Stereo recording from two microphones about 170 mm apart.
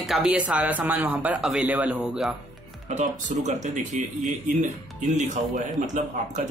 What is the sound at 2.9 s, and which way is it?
Speech, 45° right (ahead or behind).